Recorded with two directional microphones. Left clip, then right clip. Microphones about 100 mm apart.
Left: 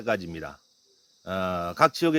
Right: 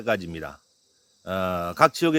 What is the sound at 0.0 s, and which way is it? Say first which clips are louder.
Speech: right 2 dB; 30° right (ahead or behind).